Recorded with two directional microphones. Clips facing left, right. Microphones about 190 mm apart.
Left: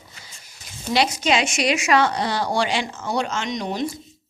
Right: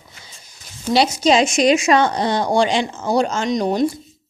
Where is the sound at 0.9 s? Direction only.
35° right (ahead or behind).